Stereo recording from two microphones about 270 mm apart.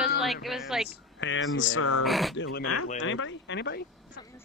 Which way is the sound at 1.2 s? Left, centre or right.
Left.